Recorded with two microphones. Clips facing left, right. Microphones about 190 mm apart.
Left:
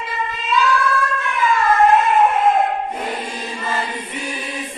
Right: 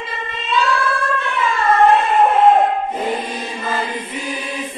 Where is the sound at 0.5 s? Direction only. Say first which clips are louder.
Even; 30° right (ahead or behind).